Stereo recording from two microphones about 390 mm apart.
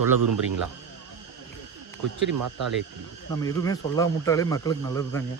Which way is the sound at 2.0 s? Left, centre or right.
Right.